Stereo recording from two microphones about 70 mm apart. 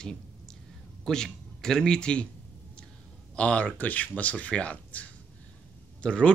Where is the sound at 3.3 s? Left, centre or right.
Centre.